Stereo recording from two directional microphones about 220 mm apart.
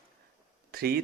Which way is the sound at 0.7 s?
45° right (ahead or behind).